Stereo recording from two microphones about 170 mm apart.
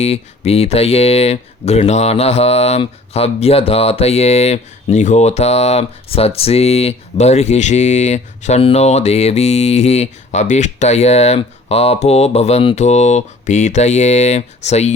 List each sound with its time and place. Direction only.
0.0 s speech: 35° left (ahead or behind)